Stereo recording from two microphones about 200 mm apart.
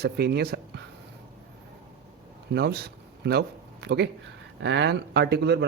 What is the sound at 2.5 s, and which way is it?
Speech, 50° right (ahead or behind).